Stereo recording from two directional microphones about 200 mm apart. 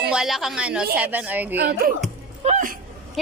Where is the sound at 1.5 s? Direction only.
50° right (ahead or behind).